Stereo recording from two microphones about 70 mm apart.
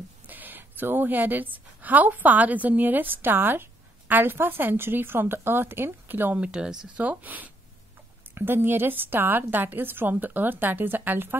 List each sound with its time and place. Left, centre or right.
0.3 s a woman's voice: right
6.4 s speech: centre
7.1 s a woman's voice: right